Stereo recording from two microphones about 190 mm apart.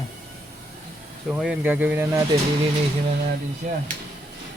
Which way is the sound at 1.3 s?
5° right (ahead or behind).